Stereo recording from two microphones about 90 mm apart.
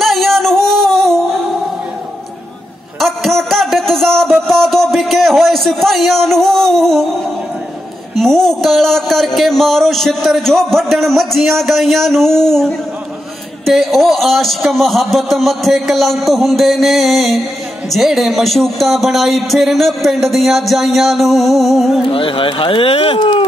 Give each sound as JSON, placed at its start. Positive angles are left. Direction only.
{"t": 0.0, "sound": "music", "side_deg": 0}
{"t": 3.0, "sound": "music", "side_deg": 0}
{"t": 8.2, "sound": "speech", "side_deg": 5}
{"t": 22.1, "sound": "speech", "side_deg": 80}